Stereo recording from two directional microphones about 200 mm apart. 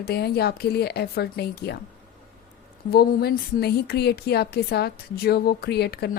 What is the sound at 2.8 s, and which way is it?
A woman's voice, 50° left (ahead or behind).